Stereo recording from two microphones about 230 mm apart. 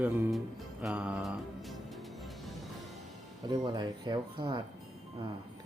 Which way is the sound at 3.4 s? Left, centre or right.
Centre.